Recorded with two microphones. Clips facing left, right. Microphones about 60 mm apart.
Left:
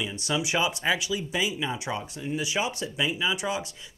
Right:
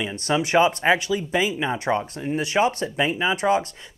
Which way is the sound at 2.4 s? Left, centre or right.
Right.